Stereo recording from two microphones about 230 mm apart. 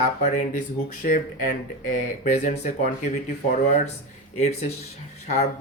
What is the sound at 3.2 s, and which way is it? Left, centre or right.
Speech, left.